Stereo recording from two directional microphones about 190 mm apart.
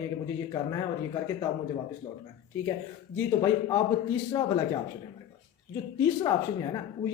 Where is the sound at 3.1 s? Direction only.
20° left (ahead or behind).